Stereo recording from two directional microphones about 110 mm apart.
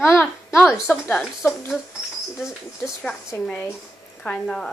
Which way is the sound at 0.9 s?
20° left (ahead or behind).